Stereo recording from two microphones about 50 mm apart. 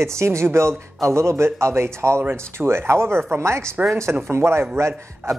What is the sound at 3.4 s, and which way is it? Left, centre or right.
Speech, right.